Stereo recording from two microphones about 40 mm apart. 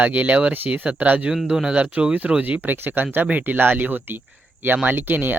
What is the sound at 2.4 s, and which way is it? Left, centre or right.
Speech, right.